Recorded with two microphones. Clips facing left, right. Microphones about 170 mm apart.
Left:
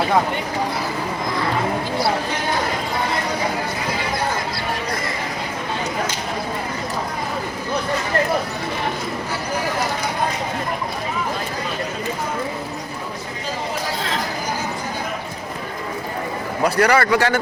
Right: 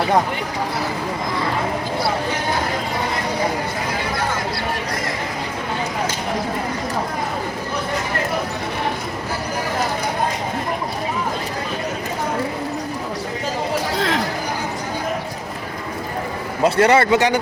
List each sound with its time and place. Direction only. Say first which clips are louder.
16.6 s speech: right 2 dB; 25° right (ahead or behind)